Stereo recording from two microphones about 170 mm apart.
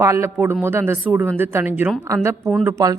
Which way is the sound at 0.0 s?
15° right (ahead or behind).